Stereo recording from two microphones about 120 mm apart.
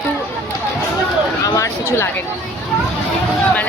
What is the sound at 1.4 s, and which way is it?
Speech, 30° left (ahead or behind).